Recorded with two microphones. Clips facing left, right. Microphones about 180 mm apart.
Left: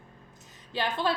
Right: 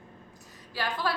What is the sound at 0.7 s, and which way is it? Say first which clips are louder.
Speech: left 3 dB; 25° left (ahead or behind).